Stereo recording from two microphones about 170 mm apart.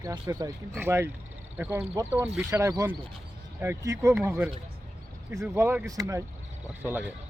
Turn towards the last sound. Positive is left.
turn(degrees=-10)  # may be behind; listen again after turning